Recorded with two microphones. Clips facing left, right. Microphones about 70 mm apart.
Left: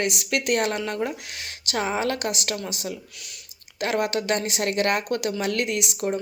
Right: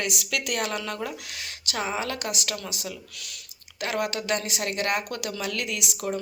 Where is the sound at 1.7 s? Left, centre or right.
Left.